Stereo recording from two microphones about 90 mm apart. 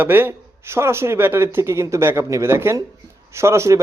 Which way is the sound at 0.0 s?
25° right (ahead or behind).